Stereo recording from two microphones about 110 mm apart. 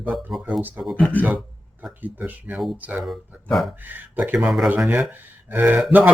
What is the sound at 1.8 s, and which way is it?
Speech, 15° right (ahead or behind).